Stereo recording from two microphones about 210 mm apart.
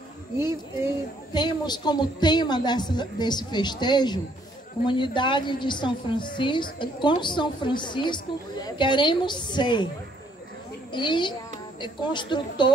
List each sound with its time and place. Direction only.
1.3 s a woman's voice: 20° left (ahead or behind)
10.9 s a woman's voice: 20° left (ahead or behind)